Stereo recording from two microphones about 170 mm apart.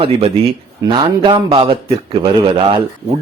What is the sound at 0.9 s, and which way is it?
Speech, 30° right (ahead or behind).